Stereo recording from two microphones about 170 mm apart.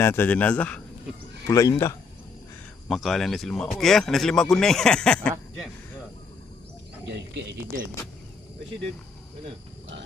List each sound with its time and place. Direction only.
0.0 s a man's voice: 10° left (ahead or behind)
1.5 s a man's voice: 20° left (ahead or behind)
2.9 s speech: centre (ahead or behind)
7.1 s speech: 75° right (ahead or behind)